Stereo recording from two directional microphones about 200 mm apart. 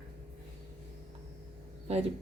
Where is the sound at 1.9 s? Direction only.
30° right (ahead or behind).